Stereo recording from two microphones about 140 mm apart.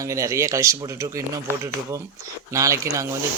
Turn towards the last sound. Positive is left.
turn(degrees=-20)  # may be behind; listen again after turning